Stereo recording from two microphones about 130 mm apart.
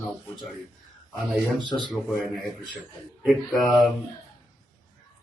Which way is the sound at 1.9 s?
Centre (ahead or behind).